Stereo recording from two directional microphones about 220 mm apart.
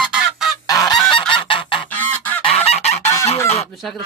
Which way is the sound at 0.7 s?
15° left (ahead or behind).